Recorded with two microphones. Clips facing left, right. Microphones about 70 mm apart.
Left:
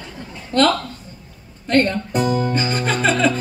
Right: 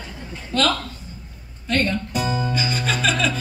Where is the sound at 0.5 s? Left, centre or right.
Left.